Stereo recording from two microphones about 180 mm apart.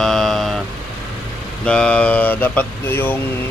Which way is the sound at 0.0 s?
Centre (ahead or behind).